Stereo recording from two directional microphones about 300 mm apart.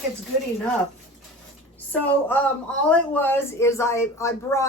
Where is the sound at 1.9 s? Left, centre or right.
Centre.